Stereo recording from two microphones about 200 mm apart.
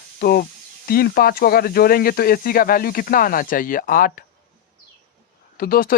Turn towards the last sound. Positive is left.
turn(degrees=45)  # may be behind; listen again after turning